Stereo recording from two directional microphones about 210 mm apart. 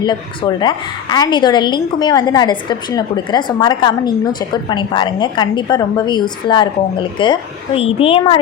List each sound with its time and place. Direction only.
0.0 s a woman's voice: 20° left (ahead or behind)